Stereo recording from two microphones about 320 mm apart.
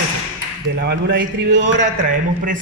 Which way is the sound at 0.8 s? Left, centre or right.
Right.